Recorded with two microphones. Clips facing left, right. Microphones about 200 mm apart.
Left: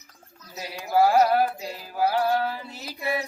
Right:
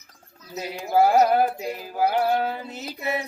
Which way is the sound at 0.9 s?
25° right (ahead or behind).